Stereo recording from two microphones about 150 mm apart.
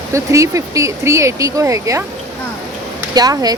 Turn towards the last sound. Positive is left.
turn(degrees=-25)  # may be behind; listen again after turning